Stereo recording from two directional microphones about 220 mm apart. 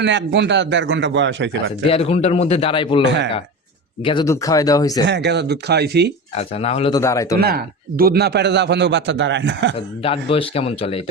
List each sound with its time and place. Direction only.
0.0 s a man's voice: 55° right (ahead or behind)
1.9 s a man's voice: 25° left (ahead or behind)
4.0 s speech: 20° left (ahead or behind)
5.0 s a man's voice: 50° right (ahead or behind)
6.3 s a man's voice: 30° left (ahead or behind)
7.0 s speech: 15° left (ahead or behind)
7.3 s a man's voice: 45° right (ahead or behind)
10.0 s a man's voice: 25° left (ahead or behind)